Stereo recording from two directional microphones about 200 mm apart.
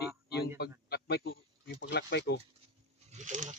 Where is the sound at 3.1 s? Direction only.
40° right (ahead or behind).